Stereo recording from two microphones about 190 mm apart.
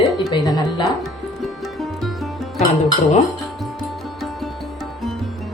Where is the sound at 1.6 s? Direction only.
Centre (ahead or behind).